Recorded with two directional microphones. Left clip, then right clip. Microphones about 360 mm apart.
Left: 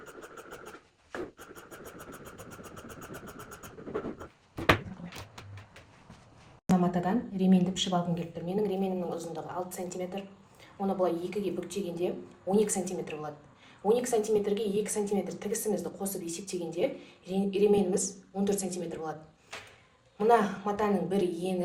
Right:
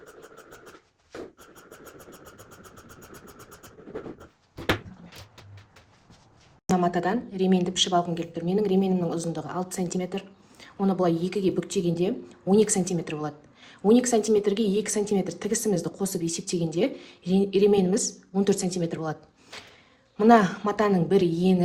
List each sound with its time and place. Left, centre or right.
6.7 s speech: right
20.1 s speech: right